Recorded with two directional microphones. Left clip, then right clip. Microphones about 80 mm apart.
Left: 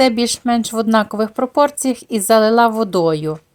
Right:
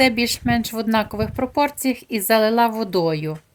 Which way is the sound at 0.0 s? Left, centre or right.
Left.